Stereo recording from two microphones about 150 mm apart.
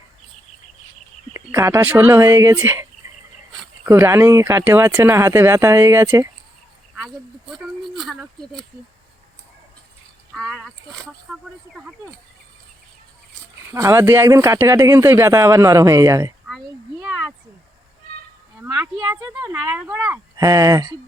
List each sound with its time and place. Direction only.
1.3 s speech: 20° right (ahead or behind)
3.8 s speech: 15° right (ahead or behind)
7.5 s speech: centre (ahead or behind)
10.3 s speech: centre (ahead or behind)
13.7 s speech: 20° right (ahead or behind)
17.0 s a sound: 5° right (ahead or behind)
19.1 s speech: 25° right (ahead or behind)
19.7 s speech: 5° right (ahead or behind)
20.1 s speech: 20° right (ahead or behind)